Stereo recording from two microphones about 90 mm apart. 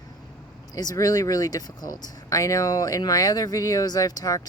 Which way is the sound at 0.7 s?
40° left (ahead or behind).